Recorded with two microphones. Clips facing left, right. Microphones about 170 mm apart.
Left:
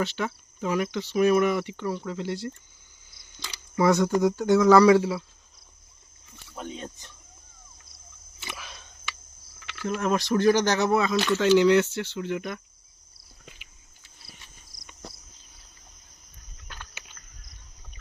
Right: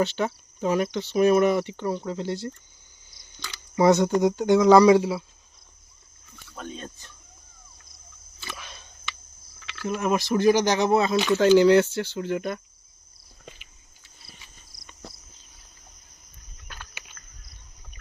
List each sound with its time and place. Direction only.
0.0 s speech: 30° right (ahead or behind)
3.8 s speech: 20° right (ahead or behind)
6.6 s speech: 15° left (ahead or behind)
8.5 s a sound: centre (ahead or behind)
9.8 s speech: 5° right (ahead or behind)
10.9 s speech: 30° right (ahead or behind)
16.6 s a sound: 10° right (ahead or behind)